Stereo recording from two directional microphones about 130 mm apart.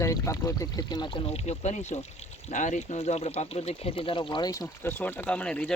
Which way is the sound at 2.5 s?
70° left (ahead or behind).